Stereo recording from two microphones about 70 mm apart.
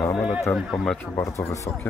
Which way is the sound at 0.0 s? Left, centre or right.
Left.